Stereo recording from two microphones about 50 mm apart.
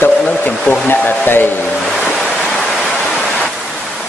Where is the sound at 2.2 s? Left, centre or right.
Centre.